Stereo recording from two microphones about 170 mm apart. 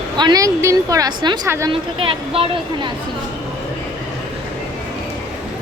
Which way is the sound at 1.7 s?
30° right (ahead or behind).